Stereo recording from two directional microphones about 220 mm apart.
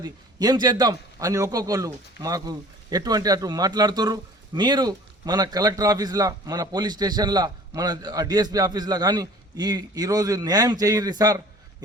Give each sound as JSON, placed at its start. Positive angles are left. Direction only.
{"t": 0.0, "sound": "a man's voice", "side_deg": -20}